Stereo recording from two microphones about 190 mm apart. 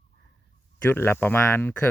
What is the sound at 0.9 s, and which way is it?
Speech, 10° left (ahead or behind).